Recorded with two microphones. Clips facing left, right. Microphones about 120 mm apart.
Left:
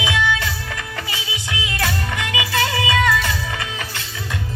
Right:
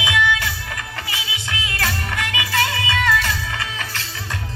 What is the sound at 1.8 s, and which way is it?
Music, 20° left (ahead or behind).